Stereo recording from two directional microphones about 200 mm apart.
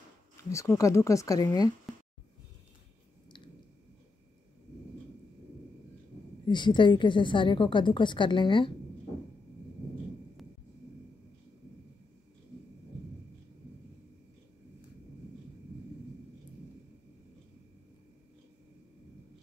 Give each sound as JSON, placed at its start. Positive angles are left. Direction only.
{"t": 0.4, "sound": "speech", "side_deg": 15}
{"t": 6.4, "sound": "a woman's voice", "side_deg": 25}